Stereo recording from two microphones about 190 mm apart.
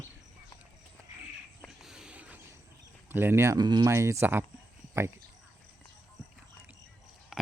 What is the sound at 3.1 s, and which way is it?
A man's voice, 10° right (ahead or behind).